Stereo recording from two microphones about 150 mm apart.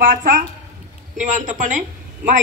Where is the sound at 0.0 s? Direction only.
60° right (ahead or behind).